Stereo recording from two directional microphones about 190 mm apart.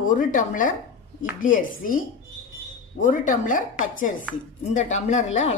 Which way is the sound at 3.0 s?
45° left (ahead or behind).